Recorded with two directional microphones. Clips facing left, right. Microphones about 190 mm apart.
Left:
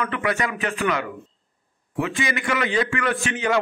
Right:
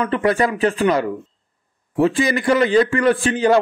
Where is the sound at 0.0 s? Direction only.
35° right (ahead or behind).